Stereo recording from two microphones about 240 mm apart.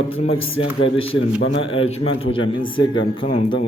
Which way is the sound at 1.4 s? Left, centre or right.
Left.